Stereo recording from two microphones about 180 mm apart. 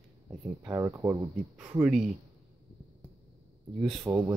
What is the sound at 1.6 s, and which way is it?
Speech, 5° right (ahead or behind).